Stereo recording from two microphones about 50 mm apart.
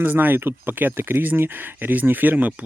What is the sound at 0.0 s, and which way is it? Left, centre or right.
Speech, right.